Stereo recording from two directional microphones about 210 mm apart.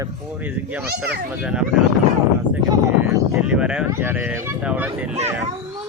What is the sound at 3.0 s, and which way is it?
Speech, 5° right (ahead or behind).